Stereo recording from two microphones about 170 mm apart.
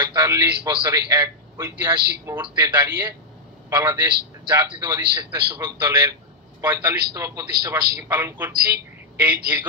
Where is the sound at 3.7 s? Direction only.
15° right (ahead or behind).